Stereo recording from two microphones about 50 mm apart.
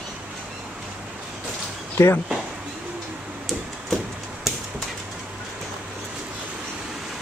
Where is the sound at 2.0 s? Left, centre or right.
Left.